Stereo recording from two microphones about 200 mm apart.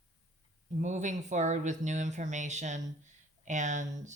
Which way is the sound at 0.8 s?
35° right (ahead or behind).